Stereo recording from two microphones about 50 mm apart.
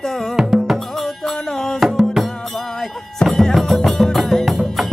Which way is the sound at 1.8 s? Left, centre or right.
Centre.